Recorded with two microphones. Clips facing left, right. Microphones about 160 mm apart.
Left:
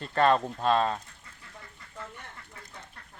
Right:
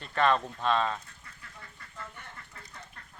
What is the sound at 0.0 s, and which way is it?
Speech, 35° left (ahead or behind).